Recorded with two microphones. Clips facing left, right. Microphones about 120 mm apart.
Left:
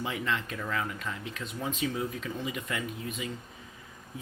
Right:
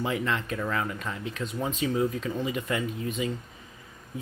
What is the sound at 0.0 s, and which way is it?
Speech, 45° right (ahead or behind).